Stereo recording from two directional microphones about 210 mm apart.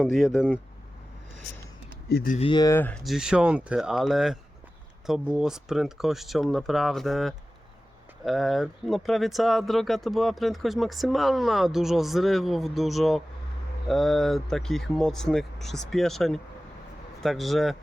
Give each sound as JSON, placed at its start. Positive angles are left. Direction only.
{"t": 0.0, "sound": "speech", "side_deg": 0}
{"t": 2.0, "sound": "speech", "side_deg": 50}
{"t": 2.3, "sound": "speech", "side_deg": 25}